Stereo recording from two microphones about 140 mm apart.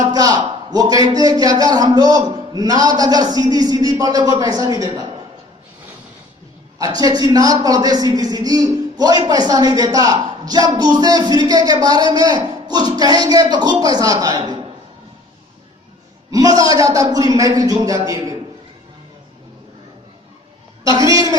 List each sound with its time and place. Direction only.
0.1 s a man's voice: 25° right (ahead or behind)
6.7 s a man's voice: 30° right (ahead or behind)
16.3 s a man's voice: 25° right (ahead or behind)
21.0 s a man's voice: 25° right (ahead or behind)